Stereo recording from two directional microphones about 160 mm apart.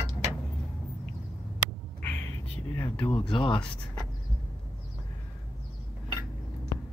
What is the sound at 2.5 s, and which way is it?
Speech, 15° left (ahead or behind).